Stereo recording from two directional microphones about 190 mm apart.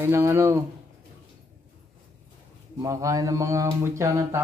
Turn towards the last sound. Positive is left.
turn(degrees=-15)  # may be behind; listen again after turning